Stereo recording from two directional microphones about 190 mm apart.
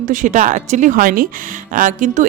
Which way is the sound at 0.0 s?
40° right (ahead or behind).